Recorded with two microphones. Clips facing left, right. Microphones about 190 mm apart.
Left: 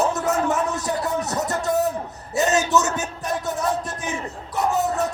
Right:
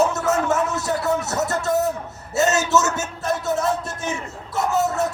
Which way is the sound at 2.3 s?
15° left (ahead or behind).